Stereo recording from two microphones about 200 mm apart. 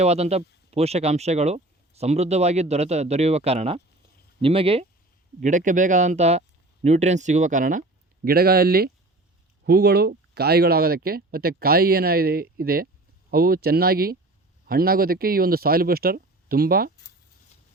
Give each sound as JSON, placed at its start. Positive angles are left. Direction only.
{"t": 0.0, "sound": "speech", "side_deg": -30}
{"t": 5.4, "sound": "speech", "side_deg": -40}